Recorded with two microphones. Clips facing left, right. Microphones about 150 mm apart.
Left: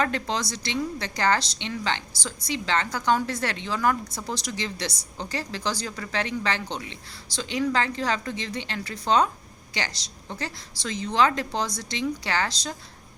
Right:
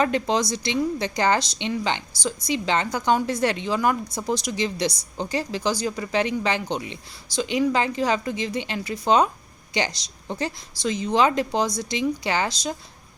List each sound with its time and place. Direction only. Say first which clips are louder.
0.0 s a woman's voice: right 5 dB; 15° right (ahead or behind)